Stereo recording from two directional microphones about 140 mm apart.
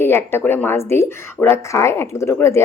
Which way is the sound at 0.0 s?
15° left (ahead or behind).